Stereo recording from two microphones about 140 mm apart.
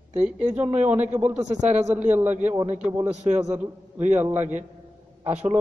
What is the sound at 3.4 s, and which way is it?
A man's voice, 15° right (ahead or behind).